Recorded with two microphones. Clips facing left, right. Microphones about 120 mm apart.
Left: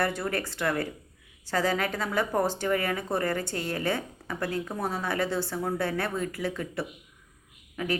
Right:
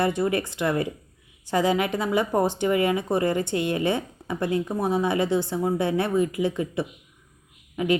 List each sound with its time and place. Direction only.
0.0 s speech: 20° right (ahead or behind)